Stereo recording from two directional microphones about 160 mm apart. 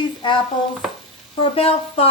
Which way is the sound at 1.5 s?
35° left (ahead or behind).